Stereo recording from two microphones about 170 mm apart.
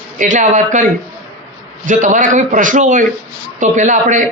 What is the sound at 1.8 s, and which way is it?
Speech, 50° right (ahead or behind).